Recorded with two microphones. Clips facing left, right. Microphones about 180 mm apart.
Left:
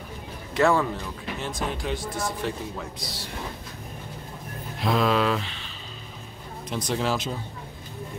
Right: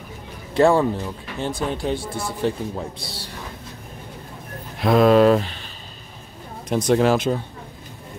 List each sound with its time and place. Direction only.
0.6 s speech: 30° right (ahead or behind)
4.8 s speech: 50° right (ahead or behind)
6.7 s speech: 55° right (ahead or behind)